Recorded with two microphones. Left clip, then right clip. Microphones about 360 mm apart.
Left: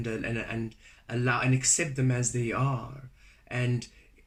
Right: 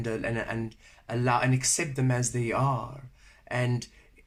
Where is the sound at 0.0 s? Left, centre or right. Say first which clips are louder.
Right 2 dB; centre.